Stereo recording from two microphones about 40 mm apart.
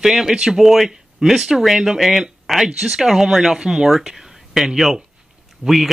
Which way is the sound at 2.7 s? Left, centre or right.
Centre.